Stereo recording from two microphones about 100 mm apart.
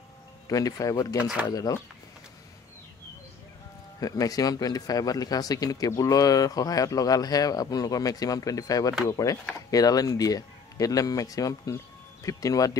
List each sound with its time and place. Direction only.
0.5 s speech: 40° left (ahead or behind)
4.0 s speech: 40° left (ahead or behind)